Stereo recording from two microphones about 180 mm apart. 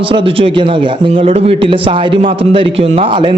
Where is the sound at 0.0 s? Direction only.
30° right (ahead or behind).